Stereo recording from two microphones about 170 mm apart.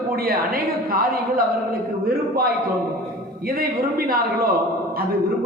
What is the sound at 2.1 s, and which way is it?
Speech, 60° right (ahead or behind).